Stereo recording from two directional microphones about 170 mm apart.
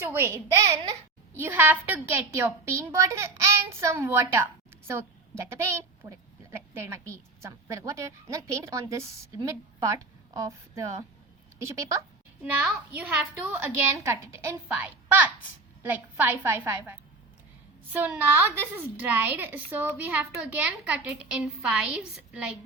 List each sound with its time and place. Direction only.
0.0 s a woman's voice: 15° right (ahead or behind)
6.0 s a woman's voice: 25° right (ahead or behind)
6.7 s a woman's voice: 15° right (ahead or behind)